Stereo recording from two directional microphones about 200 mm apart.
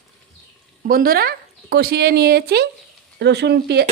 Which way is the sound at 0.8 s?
45° right (ahead or behind).